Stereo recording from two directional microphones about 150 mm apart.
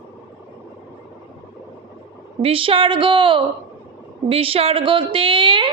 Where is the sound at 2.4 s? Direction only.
40° right (ahead or behind).